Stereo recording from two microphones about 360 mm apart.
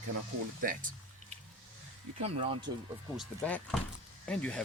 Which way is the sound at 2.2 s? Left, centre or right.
Centre.